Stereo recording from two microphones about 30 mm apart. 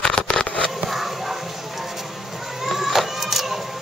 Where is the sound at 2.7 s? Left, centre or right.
Centre.